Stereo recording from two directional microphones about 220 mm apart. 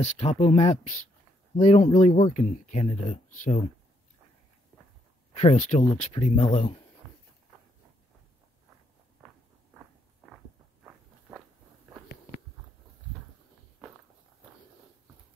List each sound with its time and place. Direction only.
0.0 s speech: 30° left (ahead or behind)
5.3 s speech: 30° left (ahead or behind)
9.2 s walk: 5° right (ahead or behind)